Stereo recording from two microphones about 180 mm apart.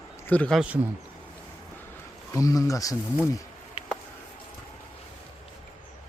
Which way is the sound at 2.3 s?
20° left (ahead or behind).